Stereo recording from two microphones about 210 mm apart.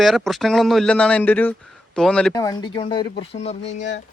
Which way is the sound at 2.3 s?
20° left (ahead or behind).